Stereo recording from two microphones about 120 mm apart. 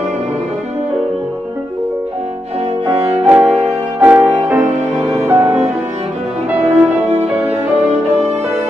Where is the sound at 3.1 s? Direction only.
10° right (ahead or behind).